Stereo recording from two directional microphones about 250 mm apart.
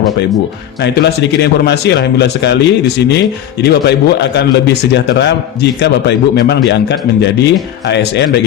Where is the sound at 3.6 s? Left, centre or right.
Left.